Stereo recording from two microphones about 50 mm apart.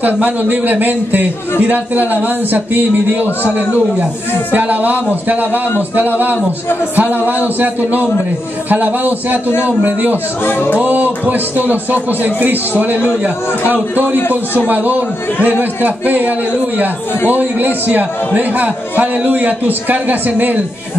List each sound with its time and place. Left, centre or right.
0.0 s a man's voice: right
10.4 s music: left
10.8 s a man's voice: right
14.7 s a man's voice: right